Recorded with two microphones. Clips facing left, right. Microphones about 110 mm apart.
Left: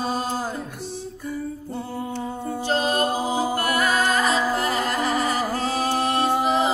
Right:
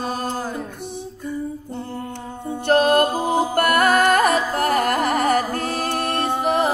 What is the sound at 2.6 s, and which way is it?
Music, 60° right (ahead or behind).